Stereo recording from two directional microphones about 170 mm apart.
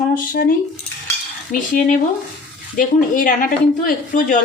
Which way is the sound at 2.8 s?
50° left (ahead or behind).